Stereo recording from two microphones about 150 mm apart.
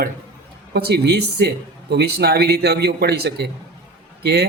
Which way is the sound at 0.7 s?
90° right.